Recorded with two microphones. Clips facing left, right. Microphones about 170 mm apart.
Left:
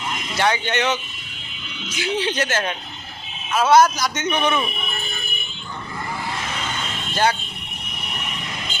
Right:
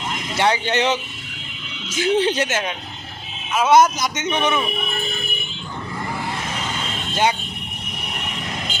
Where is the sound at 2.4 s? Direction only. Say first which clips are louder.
Even; 20° right (ahead or behind).